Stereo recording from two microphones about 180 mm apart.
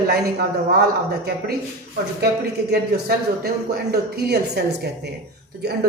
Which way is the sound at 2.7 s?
65° right (ahead or behind).